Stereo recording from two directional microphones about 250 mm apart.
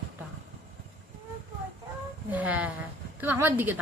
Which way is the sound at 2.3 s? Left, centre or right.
Centre.